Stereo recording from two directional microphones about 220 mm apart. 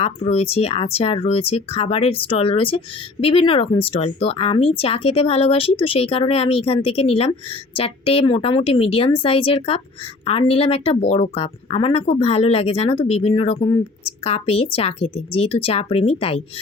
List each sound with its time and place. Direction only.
0.0 s a woman's voice: 30° left (ahead or behind)